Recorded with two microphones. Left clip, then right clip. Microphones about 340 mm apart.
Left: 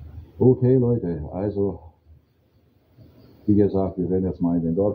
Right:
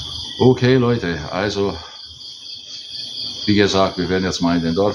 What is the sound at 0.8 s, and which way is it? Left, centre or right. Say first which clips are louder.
Speech: right 5 dB; right.